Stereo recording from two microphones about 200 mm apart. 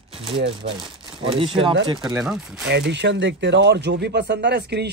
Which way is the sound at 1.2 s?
25° right (ahead or behind).